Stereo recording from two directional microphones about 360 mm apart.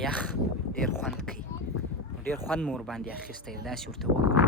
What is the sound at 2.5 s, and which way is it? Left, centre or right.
Speech, centre.